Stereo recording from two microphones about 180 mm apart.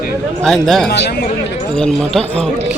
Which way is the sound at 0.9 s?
70° left (ahead or behind).